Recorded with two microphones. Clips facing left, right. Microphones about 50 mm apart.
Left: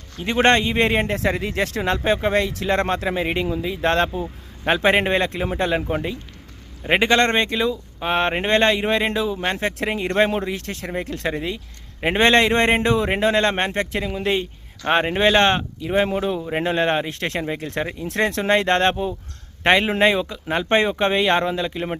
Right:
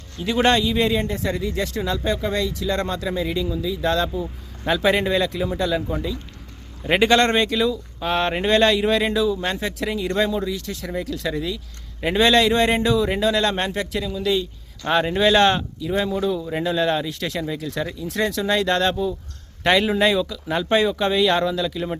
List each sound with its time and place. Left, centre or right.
0.3 s speech: left
1.0 s speech: left
6.8 s speech: left
9.6 s speech: left
14.8 s speech: left
19.6 s speech: left
20.7 s speech: left